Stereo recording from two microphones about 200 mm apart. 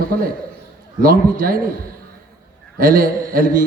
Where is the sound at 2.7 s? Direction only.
45° right (ahead or behind).